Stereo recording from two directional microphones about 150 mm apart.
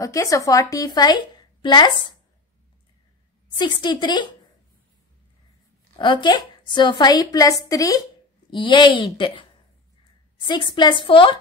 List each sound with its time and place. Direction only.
0.0 s a woman's voice: 20° left (ahead or behind)
3.5 s a woman's voice: 30° left (ahead or behind)
5.9 s a woman's voice: 30° left (ahead or behind)